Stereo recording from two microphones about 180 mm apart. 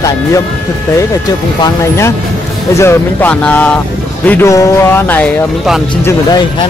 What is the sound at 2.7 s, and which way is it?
Speech, 10° left (ahead or behind).